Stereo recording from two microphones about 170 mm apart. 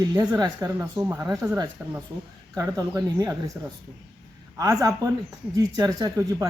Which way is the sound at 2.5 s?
20° right (ahead or behind).